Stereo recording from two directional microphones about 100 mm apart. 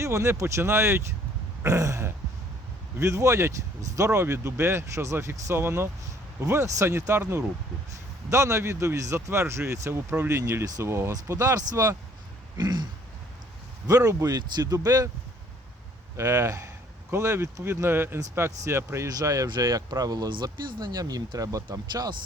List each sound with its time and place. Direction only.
0.0 s speech: 30° right (ahead or behind)
12.5 s throat clearing: 45° right (ahead or behind)
13.8 s speech: 35° right (ahead or behind)
16.1 s speech: 25° right (ahead or behind); by 22.1 s 40° right (ahead or behind)